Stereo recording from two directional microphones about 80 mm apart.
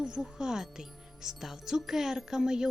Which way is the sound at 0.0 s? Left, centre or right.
Centre.